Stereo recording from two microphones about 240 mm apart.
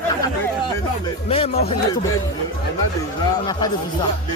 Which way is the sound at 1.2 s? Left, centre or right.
Left.